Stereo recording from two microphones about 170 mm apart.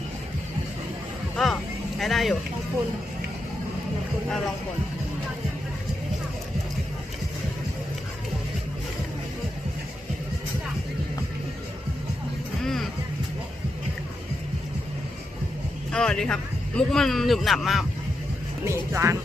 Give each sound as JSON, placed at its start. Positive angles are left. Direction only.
{"t": 2.0, "sound": "speech", "side_deg": 0}
{"t": 4.3, "sound": "speech", "side_deg": 0}
{"t": 12.6, "sound": "music", "side_deg": 0}
{"t": 15.9, "sound": "speech", "side_deg": 5}
{"t": 18.6, "sound": "speech", "side_deg": -15}